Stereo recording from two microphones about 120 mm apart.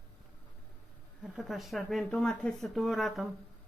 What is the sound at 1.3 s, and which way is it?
Speech, centre (ahead or behind).